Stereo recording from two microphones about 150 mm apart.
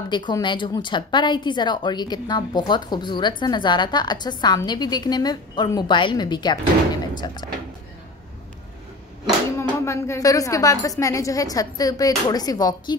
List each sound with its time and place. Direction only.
0.1 s a woman's voice: 30° left (ahead or behind)
9.6 s a woman's voice: 20° left (ahead or behind)